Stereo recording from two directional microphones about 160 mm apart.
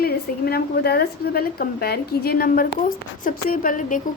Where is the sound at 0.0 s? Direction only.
70° left (ahead or behind).